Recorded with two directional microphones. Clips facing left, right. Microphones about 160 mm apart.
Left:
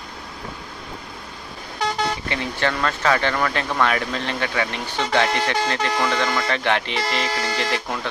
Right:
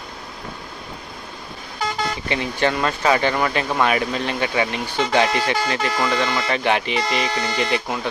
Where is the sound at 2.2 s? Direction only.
15° right (ahead or behind).